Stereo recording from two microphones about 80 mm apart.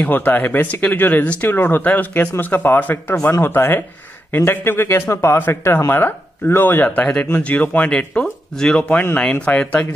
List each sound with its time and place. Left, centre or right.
0.0 s speech: left